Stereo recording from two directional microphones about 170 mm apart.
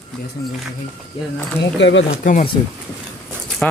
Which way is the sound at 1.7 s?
90° left.